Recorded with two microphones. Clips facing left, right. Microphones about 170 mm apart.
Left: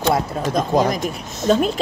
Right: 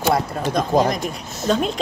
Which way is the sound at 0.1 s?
Centre (ahead or behind).